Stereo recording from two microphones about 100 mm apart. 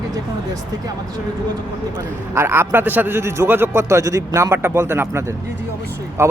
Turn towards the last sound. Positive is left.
turn(degrees=-25)  # may be behind; listen again after turning